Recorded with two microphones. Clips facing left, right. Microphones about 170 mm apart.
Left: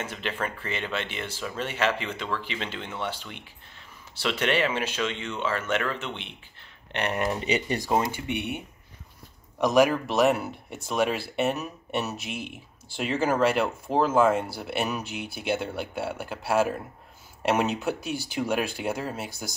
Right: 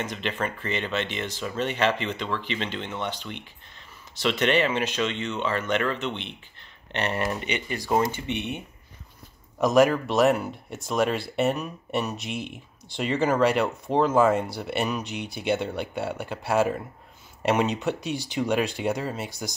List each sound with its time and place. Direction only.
0.0 s speech: 10° left (ahead or behind)
7.3 s speech: 35° left (ahead or behind)
7.8 s speech: 10° left (ahead or behind)